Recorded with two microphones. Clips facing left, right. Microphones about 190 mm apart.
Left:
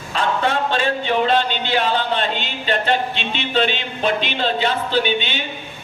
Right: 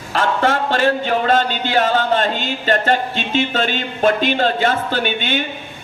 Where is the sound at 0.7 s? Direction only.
45° right (ahead or behind).